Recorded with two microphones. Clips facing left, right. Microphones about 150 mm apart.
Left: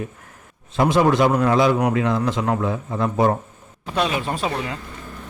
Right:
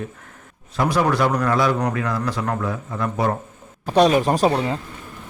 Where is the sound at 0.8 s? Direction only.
25° left (ahead or behind).